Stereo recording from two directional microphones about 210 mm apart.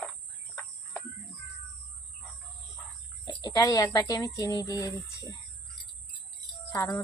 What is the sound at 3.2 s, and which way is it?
Speech, 20° left (ahead or behind).